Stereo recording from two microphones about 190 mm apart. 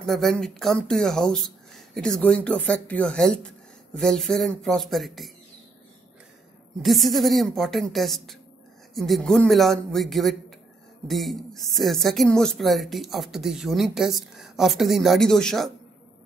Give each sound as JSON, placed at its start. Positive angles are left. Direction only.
{"t": 0.0, "sound": "speech", "side_deg": 0}
{"t": 6.8, "sound": "speech", "side_deg": 0}